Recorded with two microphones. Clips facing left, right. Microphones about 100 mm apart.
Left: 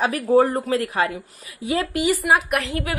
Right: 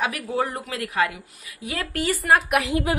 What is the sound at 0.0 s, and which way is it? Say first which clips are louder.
A woman's voice: left 8 dB; 35° left (ahead or behind).